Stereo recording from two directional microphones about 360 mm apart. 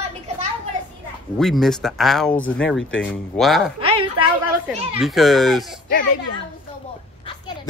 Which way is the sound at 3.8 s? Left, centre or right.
Centre.